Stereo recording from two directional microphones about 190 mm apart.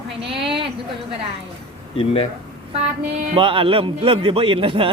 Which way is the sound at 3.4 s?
25° right (ahead or behind).